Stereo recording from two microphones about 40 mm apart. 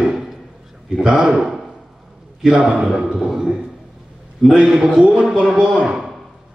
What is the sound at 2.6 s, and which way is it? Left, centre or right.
Speech, right.